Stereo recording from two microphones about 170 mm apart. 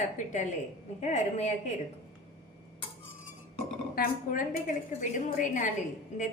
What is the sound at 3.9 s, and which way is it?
A woman's voice, 50° left (ahead or behind).